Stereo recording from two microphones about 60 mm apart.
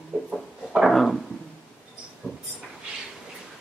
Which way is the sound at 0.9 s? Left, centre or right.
Centre.